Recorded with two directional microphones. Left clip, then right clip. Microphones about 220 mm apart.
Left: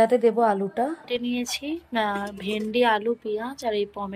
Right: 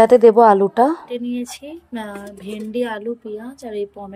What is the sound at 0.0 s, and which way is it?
Speech, 35° right (ahead or behind).